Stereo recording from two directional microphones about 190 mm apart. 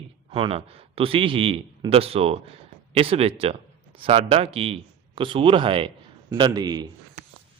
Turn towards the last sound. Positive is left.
turn(degrees=-20)  # may be behind; listen again after turning